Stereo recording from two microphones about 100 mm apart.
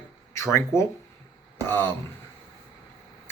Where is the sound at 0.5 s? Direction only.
30° left (ahead or behind).